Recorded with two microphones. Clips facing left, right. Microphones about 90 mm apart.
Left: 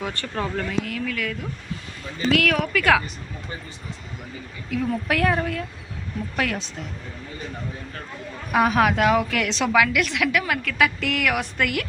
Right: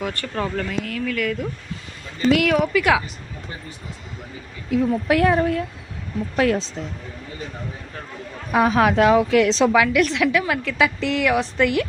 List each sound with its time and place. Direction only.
0.3 s speech: 5° left (ahead or behind)
1.0 s speech: centre (ahead or behind)
2.7 s a woman's voice: 20° right (ahead or behind)
4.7 s a woman's voice: 25° right (ahead or behind)
8.5 s a woman's voice: 30° right (ahead or behind)